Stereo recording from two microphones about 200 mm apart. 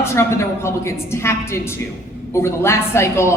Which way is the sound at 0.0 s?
15° left (ahead or behind).